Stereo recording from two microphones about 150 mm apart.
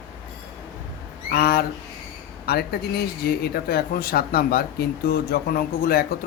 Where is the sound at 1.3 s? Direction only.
90° left.